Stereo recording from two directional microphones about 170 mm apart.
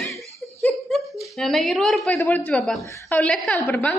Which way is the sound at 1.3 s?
Centre (ahead or behind).